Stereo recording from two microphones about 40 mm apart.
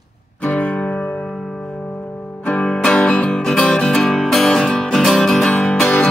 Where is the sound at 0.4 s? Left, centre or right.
Left.